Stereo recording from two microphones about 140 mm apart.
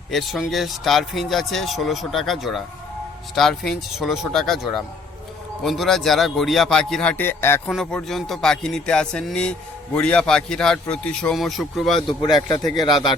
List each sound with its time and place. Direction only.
0.1 s a man's voice: centre (ahead or behind); by 7.6 s 15° left (ahead or behind)
7.7 s a man's voice: 5° left (ahead or behind)
12.4 s a man's voice: 30° left (ahead or behind)